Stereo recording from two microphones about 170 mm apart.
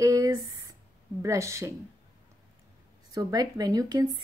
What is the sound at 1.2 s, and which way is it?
Speech, 15° right (ahead or behind).